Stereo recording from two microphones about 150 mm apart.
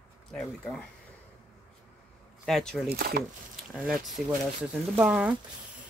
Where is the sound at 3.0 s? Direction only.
90° right.